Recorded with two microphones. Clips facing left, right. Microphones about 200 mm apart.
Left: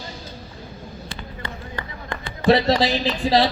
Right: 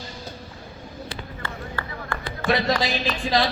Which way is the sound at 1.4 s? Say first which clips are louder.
Left 1 dB; 20° left (ahead or behind).